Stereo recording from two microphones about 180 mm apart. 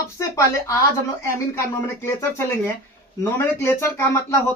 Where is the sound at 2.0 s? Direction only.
15° left (ahead or behind).